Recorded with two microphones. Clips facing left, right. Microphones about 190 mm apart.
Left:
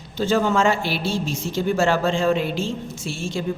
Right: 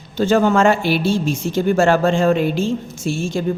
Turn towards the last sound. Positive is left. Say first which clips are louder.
# right 6 dB
turn(degrees=-45)  # may be behind; listen again after turning